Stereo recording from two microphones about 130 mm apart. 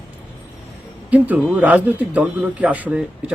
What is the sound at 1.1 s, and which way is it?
A man's voice, 10° right (ahead or behind).